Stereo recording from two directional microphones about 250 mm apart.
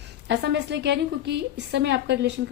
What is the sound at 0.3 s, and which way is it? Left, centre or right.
A woman's voice, right.